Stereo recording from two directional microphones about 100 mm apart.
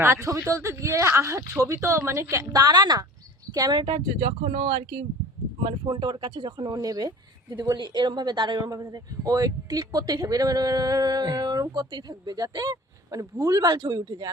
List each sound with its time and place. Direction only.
0.0 s speech: 25° right (ahead or behind)
3.8 s speech: 70° right (ahead or behind); by 14.3 s 35° right (ahead or behind)